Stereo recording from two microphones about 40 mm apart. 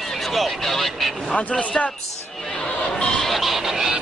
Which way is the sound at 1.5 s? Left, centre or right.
Left.